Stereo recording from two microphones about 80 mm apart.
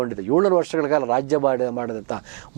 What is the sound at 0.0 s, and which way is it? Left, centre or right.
Speech, right.